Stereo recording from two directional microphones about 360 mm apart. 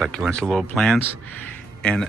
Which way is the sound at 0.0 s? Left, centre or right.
Centre.